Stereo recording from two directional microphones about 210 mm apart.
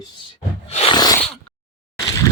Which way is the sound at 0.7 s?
25° left (ahead or behind).